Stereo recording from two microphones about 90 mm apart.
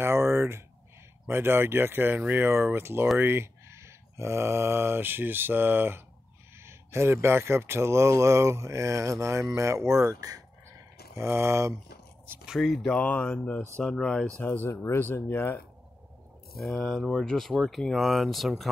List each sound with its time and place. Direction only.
0.0 s a sound: 30° right (ahead or behind)
1.2 s speech: 25° right (ahead or behind); by 10.4 s 40° right (ahead or behind)
11.1 s speech: 30° right (ahead or behind)
12.4 s speech: centre (ahead or behind)
13.0 s speech: 15° left (ahead or behind)
14.4 s speech: 25° left (ahead or behind)
16.6 s speech: 5° left (ahead or behind)